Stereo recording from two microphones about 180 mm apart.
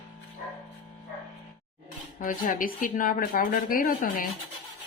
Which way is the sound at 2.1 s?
50° left (ahead or behind).